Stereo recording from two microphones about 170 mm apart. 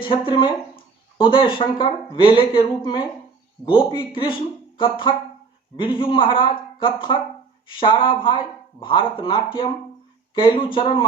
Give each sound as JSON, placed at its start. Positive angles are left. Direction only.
{"t": 0.0, "sound": "speech", "side_deg": 30}